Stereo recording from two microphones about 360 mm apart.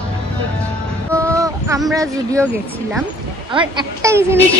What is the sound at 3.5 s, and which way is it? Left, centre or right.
Speech, centre.